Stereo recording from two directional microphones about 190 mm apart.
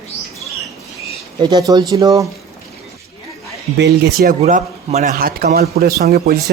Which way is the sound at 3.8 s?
60° right (ahead or behind).